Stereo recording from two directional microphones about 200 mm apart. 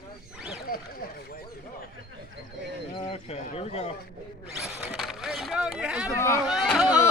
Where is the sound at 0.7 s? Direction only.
45° left (ahead or behind).